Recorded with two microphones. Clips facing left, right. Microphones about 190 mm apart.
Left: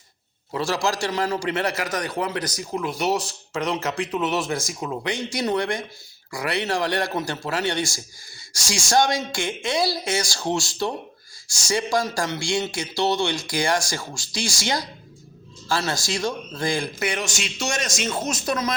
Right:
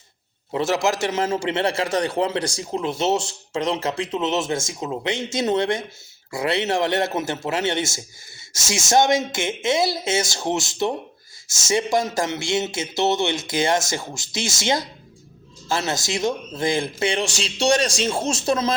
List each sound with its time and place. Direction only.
0.5 s a man's voice: 20° right (ahead or behind)